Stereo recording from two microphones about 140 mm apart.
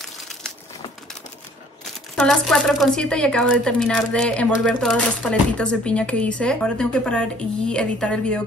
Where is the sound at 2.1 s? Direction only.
5° left (ahead or behind).